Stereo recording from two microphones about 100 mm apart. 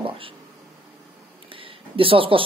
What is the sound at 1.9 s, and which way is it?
Speech, 65° right (ahead or behind).